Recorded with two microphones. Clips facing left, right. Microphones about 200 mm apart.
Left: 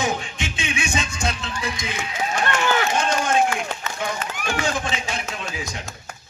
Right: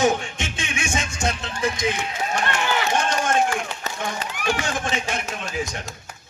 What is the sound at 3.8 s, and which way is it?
Run, 40° right (ahead or behind).